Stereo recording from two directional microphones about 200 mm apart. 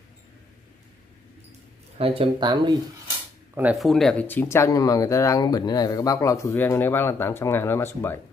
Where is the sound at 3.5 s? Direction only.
5° right (ahead or behind).